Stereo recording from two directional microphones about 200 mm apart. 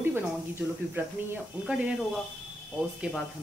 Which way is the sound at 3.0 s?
5° right (ahead or behind).